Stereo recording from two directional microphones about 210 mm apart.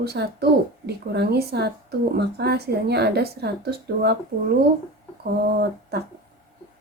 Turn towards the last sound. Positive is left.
turn(degrees=-50)  # may be behind; listen again after turning